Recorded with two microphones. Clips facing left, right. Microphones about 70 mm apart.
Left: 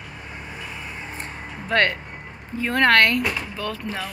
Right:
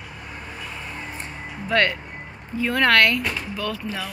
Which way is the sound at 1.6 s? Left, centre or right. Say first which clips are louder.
Even; left.